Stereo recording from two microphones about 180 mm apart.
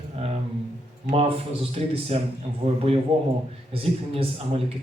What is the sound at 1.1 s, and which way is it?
Speech, 35° right (ahead or behind).